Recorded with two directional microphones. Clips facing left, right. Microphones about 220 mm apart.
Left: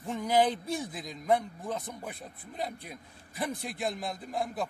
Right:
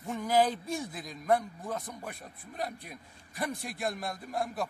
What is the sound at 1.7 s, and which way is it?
Speech, 5° left (ahead or behind).